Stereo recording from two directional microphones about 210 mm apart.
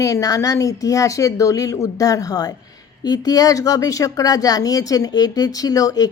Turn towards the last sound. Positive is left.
turn(degrees=15)  # may be behind; listen again after turning